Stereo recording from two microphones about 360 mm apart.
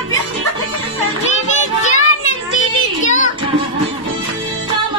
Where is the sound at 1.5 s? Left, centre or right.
Centre.